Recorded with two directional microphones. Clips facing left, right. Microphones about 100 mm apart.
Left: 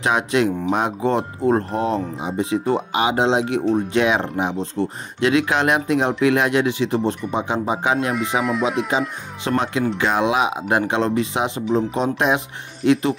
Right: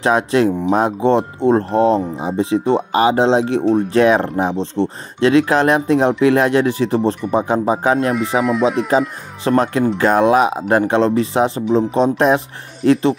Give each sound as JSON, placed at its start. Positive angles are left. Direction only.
{"t": 0.0, "sound": "speech", "side_deg": -35}
{"t": 8.1, "sound": "speech", "side_deg": 0}
{"t": 9.4, "sound": "speech", "side_deg": -40}